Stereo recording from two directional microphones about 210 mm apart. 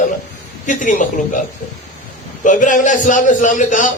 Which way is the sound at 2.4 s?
35° left (ahead or behind).